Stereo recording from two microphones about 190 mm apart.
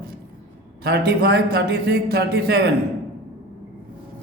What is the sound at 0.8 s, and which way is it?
A man's voice, 55° right (ahead or behind).